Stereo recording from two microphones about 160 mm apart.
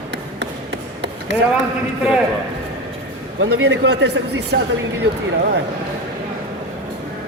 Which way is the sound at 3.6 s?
90° right.